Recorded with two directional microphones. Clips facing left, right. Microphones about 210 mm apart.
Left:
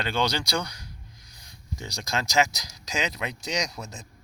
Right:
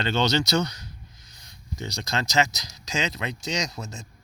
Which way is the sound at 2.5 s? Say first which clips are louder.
Right 2 dB; 15° left (ahead or behind).